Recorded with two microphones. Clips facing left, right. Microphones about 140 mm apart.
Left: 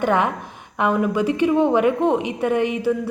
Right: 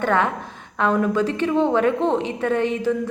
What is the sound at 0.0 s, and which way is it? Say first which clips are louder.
A woman's voice: left 1 dB; 15° left (ahead or behind).